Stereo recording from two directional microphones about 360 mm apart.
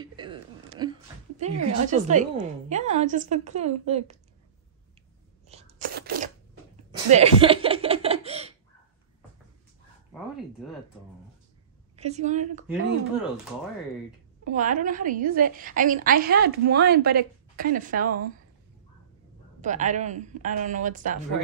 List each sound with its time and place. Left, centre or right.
0.0 s a woman's voice: centre
5.5 s a sound: centre
6.9 s speech: centre
12.0 s a woman's voice: centre
14.5 s a woman's voice: right
19.6 s a woman's voice: centre